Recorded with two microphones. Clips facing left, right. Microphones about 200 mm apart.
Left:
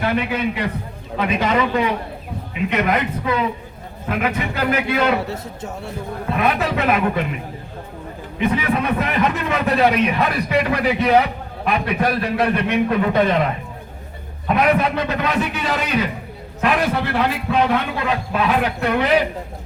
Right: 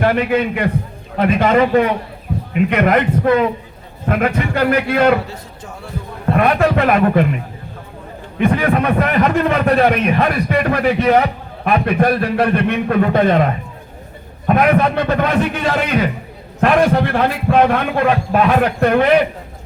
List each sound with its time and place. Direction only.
0.0 s a man's voice: 50° right (ahead or behind)
5.3 s a man's voice: 25° left (ahead or behind)
6.2 s a man's voice: 50° right (ahead or behind)
8.4 s a man's voice: 55° right (ahead or behind)